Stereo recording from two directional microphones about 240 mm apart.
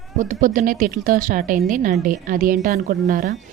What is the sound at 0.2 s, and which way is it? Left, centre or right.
A woman's voice, right.